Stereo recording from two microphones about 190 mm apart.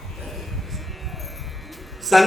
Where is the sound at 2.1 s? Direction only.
Centre (ahead or behind).